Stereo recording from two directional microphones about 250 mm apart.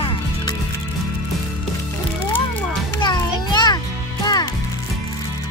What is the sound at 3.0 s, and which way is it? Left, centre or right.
Children playing, centre.